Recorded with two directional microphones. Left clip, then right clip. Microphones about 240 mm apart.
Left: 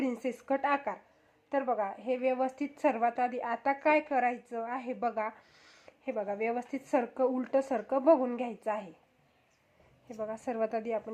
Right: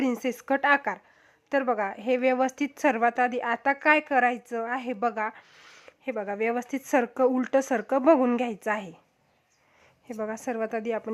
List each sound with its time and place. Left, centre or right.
0.0 s a woman's voice: right
10.1 s a woman's voice: right